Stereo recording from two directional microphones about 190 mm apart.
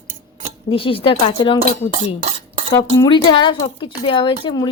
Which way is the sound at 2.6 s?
25° left (ahead or behind).